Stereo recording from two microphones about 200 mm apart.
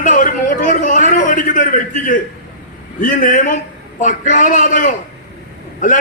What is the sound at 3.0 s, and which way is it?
A man's voice, 40° left (ahead or behind).